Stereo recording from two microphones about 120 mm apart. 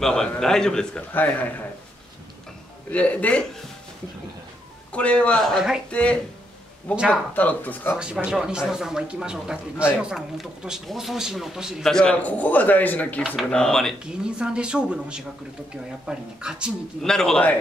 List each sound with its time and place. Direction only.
0.0 s speech: 5° left (ahead or behind)
1.1 s speech: 15° left (ahead or behind)
2.9 s speech: 10° left (ahead or behind)
4.9 s speech: 10° left (ahead or behind)
5.9 s speech: 10° left (ahead or behind)
7.3 s speech: 15° left (ahead or behind)
8.0 s speech: 10° right (ahead or behind)
14.2 s speech: 5° right (ahead or behind)
17.0 s speech: 5° left (ahead or behind)